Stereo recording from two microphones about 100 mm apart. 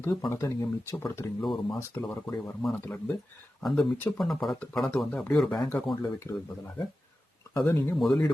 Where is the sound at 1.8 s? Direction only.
25° left (ahead or behind).